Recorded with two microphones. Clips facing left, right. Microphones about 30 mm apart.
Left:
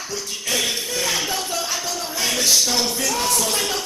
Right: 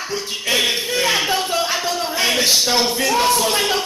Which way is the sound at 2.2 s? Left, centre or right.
Right.